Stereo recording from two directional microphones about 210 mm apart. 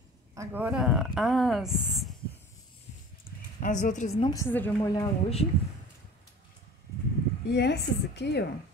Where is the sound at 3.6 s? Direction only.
35° left (ahead or behind).